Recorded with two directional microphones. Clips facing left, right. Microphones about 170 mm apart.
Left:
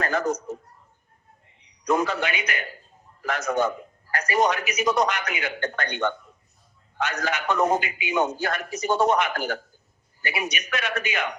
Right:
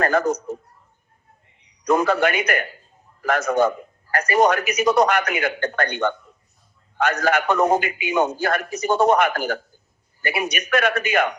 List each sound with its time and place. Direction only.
0.0 s a man's voice: 55° right (ahead or behind)
1.8 s a man's voice: 55° right (ahead or behind)